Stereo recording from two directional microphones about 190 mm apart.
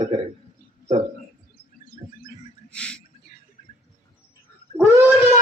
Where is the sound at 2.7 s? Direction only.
5° left (ahead or behind).